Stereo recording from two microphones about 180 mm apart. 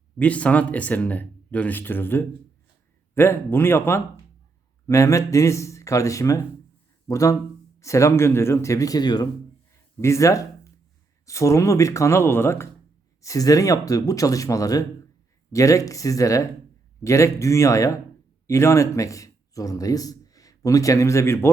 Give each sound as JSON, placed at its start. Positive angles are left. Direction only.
{"t": 0.2, "sound": "speech", "side_deg": 5}